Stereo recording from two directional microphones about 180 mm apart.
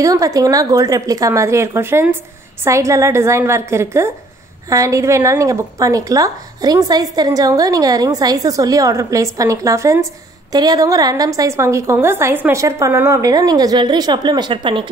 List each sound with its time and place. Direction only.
0.0 s a woman's voice: 20° right (ahead or behind)